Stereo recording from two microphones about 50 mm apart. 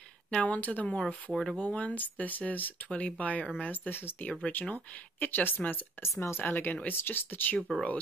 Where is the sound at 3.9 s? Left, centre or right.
Left.